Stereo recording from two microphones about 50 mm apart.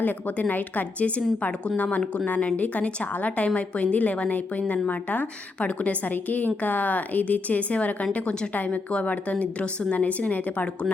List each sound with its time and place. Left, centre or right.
0.0 s a woman's voice: left